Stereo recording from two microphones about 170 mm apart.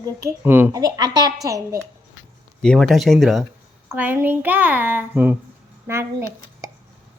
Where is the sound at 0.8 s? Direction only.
25° right (ahead or behind).